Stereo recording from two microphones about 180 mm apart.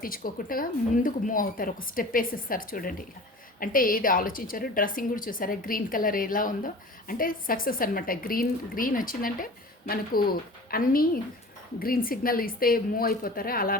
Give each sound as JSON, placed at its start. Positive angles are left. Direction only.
{"t": 0.0, "sound": "a woman's voice", "side_deg": 50}